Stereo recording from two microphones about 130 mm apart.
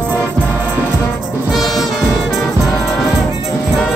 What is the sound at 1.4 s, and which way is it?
Music, centre (ahead or behind).